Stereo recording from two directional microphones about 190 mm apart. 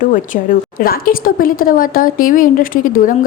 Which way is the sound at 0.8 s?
50° left (ahead or behind).